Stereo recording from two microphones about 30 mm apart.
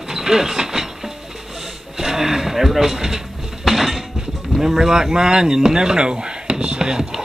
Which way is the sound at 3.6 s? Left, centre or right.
Centre.